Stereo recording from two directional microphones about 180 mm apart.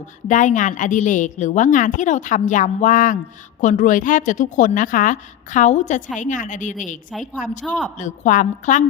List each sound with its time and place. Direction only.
0.3 s a woman's voice: 45° left (ahead or behind)
7.6 s a man's voice: 5° left (ahead or behind)
7.9 s a woman's voice: 45° left (ahead or behind)